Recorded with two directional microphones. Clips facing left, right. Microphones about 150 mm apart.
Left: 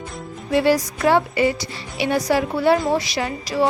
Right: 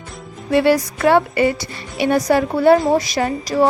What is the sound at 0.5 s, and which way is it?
A woman's voice, 60° right (ahead or behind).